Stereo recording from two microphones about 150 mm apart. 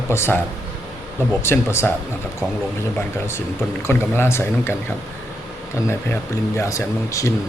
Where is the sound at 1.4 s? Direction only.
15° left (ahead or behind).